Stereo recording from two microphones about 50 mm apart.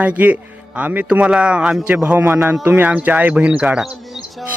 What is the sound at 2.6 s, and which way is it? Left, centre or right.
A man's voice, right.